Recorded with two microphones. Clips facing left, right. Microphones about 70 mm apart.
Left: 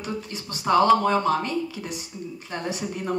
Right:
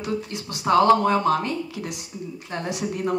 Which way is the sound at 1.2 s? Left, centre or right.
Centre.